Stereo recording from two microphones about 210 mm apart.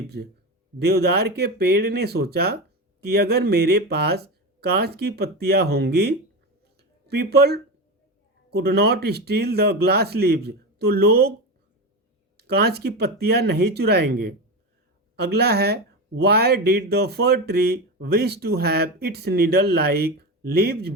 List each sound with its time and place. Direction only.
0.9 s speech: 50° right (ahead or behind)
6.7 s a sound: 50° right (ahead or behind)
8.4 s speech: 50° right (ahead or behind)
12.4 s speech: 50° right (ahead or behind)